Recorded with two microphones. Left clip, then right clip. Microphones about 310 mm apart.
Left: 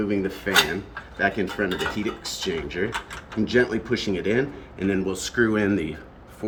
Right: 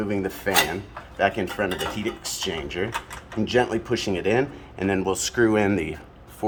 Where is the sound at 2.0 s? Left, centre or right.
Centre.